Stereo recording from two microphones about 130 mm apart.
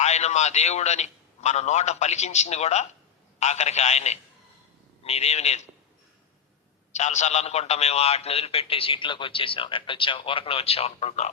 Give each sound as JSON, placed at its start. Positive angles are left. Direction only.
{"t": 0.0, "sound": "a man's voice", "side_deg": 60}
{"t": 6.9, "sound": "a man's voice", "side_deg": 65}